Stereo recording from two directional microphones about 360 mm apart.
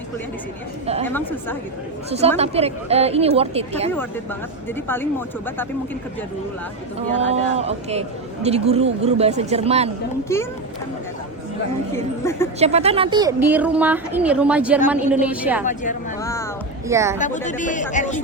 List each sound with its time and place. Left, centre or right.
1.0 s speech: centre
2.0 s speech: centre
7.2 s speech: centre
10.3 s a woman's voice: centre
11.9 s a woman's voice: centre
12.5 s speech: centre
15.6 s speech: left
16.2 s a sound: centre
16.9 s speech: centre
17.2 s speech: centre